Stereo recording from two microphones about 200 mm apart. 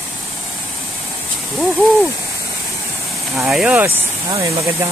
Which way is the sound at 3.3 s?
5° right (ahead or behind).